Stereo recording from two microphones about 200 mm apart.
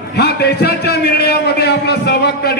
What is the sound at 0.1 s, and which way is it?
A man's voice, 55° left (ahead or behind).